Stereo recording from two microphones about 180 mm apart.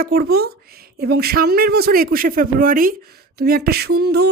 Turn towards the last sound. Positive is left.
turn(degrees=-60)  # may be behind; listen again after turning